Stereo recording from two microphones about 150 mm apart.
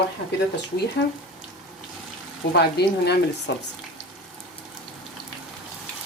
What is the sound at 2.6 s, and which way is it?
Speech, 90° left.